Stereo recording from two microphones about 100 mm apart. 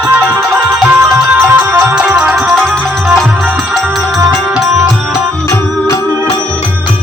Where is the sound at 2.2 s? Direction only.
5° right (ahead or behind).